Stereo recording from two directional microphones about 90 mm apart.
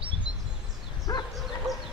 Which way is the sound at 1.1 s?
45° left (ahead or behind).